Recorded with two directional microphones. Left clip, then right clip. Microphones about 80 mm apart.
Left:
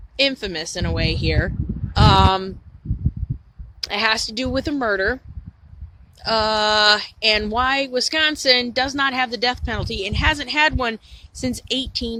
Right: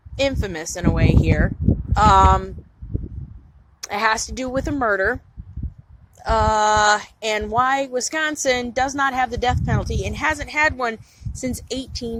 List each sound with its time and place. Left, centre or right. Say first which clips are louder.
0.2 s a woman's voice: left 2 dB; left
0.9 s speech: right 3 dB; left
3.8 s a woman's voice: even; left
6.1 s a woman's voice: right 1 dB; left
11.8 s speech: left 4 dB; right